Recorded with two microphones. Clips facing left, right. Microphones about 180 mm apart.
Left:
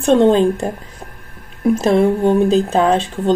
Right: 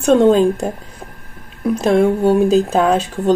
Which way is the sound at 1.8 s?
Centre (ahead or behind).